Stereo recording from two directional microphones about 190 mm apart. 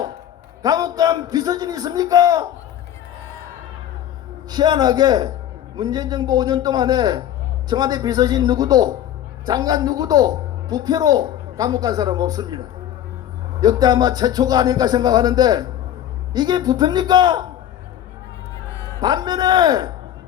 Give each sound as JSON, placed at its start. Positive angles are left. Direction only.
{"t": 0.6, "sound": "speech", "side_deg": -20}
{"t": 4.5, "sound": "speech", "side_deg": -20}
{"t": 18.9, "sound": "speech", "side_deg": -20}